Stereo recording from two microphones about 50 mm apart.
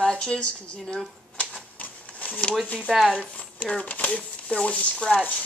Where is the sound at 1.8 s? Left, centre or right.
Left.